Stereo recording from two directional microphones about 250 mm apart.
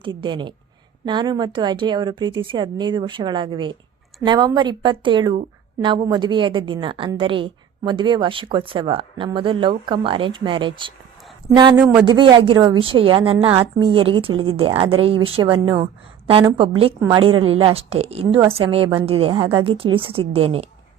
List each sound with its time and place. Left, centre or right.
0.0 s a woman's voice: centre
11.8 s speech: centre
12.0 s a woman's voice: centre